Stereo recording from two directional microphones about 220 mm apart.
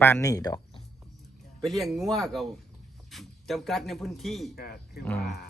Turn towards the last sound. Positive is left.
turn(degrees=5)  # may be behind; listen again after turning